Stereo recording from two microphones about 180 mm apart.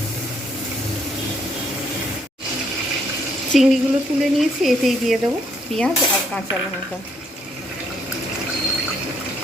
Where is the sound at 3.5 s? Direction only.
Centre (ahead or behind).